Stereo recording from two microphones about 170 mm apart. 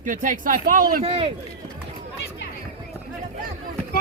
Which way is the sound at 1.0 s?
35° right (ahead or behind).